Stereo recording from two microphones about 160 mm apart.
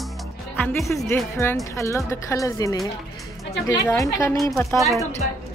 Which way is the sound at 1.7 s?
20° left (ahead or behind).